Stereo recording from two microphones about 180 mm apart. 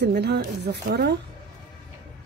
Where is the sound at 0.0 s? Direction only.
65° right (ahead or behind).